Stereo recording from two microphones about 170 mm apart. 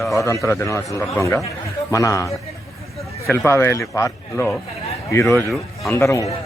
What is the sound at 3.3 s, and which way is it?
Speech, 15° left (ahead or behind).